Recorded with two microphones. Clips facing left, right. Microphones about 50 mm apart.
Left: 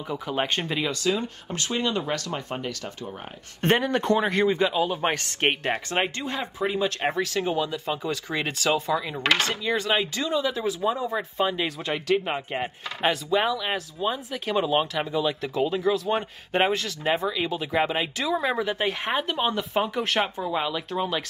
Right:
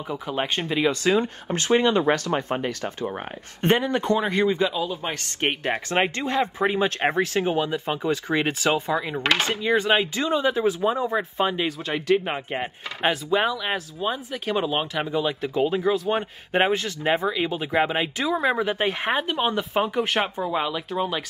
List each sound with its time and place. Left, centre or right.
0.1 s speech: centre
1.0 s speech: right
3.6 s speech: centre
6.1 s speech: right; by 11.6 s centre
11.6 s speech: centre
16.7 s speech: centre